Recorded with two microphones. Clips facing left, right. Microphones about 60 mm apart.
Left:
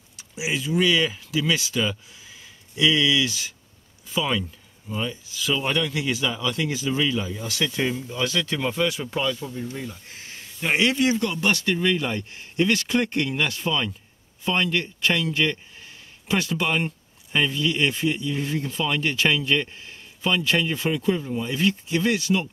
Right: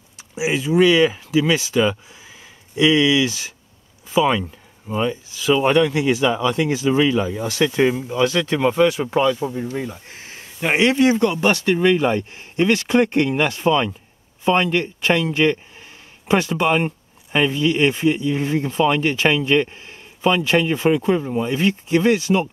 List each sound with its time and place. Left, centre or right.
0.4 s speech: centre